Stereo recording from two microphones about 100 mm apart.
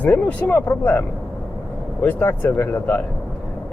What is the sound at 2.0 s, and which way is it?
Speech, 20° left (ahead or behind).